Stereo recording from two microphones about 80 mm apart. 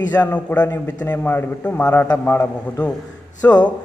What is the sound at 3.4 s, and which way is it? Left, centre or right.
Speech, left.